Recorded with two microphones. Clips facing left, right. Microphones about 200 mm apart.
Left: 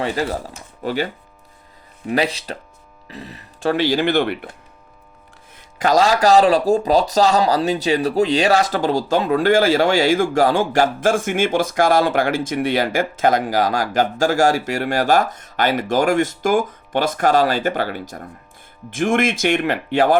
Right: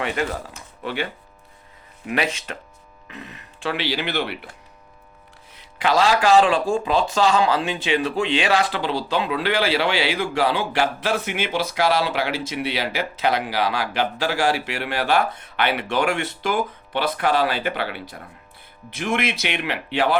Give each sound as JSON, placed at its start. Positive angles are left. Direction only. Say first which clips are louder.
{"t": 0.0, "sound": "speech", "louder": "left 3 dB", "side_deg": 35}
{"t": 5.5, "sound": "speech", "louder": "left 4 dB", "side_deg": 45}